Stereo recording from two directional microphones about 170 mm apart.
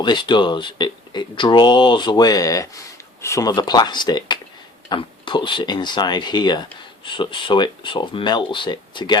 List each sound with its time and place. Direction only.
0.0 s speech: 25° left (ahead or behind)